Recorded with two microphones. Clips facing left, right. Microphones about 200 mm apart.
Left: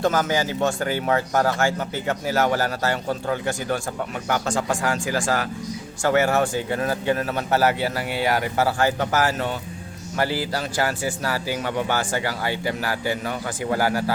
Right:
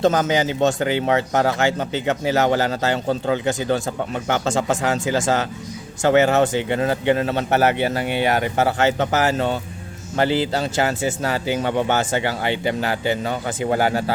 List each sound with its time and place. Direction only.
0.0 s speech: 20° right (ahead or behind)